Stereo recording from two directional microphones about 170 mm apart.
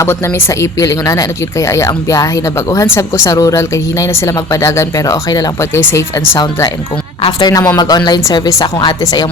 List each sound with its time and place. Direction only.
0.0 s speech: 15° left (ahead or behind)